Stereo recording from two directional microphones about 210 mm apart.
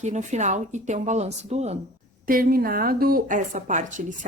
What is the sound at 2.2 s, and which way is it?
Speech, 45° right (ahead or behind).